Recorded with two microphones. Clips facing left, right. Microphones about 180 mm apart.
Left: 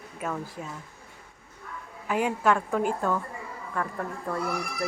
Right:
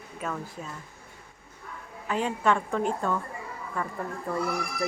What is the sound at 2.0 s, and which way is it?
Speech, 10° left (ahead or behind).